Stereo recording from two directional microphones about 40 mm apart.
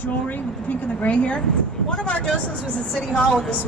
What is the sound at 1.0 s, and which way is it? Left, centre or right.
Speech, left.